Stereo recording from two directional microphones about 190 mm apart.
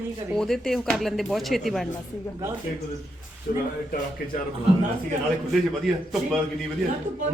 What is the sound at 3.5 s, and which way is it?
Speech, 45° left (ahead or behind).